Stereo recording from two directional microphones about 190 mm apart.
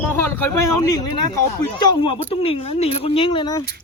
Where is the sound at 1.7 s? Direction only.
25° left (ahead or behind).